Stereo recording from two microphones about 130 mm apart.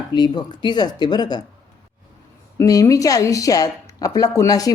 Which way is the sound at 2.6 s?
25° left (ahead or behind).